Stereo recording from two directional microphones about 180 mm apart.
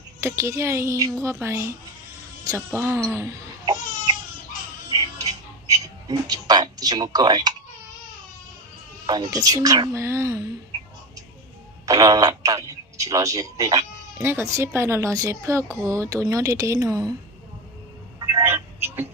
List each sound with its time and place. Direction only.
0.2 s speech: 15° right (ahead or behind)
2.7 s babbling: 15° right (ahead or behind)
4.9 s music: 20° right (ahead or behind)
9.0 s speech: 25° right (ahead or behind)
11.9 s speech: 20° right (ahead or behind)
18.2 s a sound: 15° right (ahead or behind)